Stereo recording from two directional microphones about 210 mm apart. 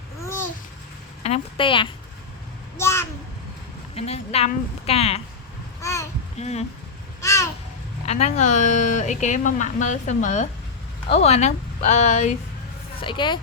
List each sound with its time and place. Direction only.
0.2 s babbling: 15° left (ahead or behind)
1.2 s a woman's voice: 25° left (ahead or behind)
2.7 s a sound: 10° left (ahead or behind)
3.9 s a woman's voice: 30° left (ahead or behind)
5.8 s babbling: 15° left (ahead or behind)
6.3 s speech: 30° left (ahead or behind)
7.2 s babbling: 15° left (ahead or behind)
8.0 s speech: 30° left (ahead or behind)
13.0 s a woman's voice: 25° left (ahead or behind)